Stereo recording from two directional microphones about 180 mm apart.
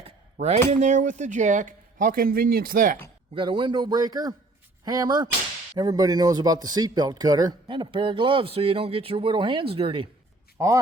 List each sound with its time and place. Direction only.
0.0 s a sound: 35° right (ahead or behind)
0.7 s speech: 40° right (ahead or behind)
3.3 s a man's voice: 25° right (ahead or behind)
10.6 s speech: 15° right (ahead or behind)